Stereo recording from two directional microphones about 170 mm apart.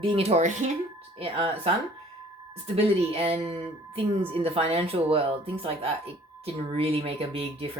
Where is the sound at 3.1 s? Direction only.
35° right (ahead or behind).